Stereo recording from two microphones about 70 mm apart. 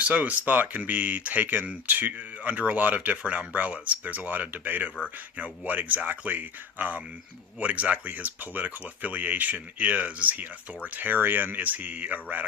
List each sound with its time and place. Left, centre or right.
0.0 s speech: right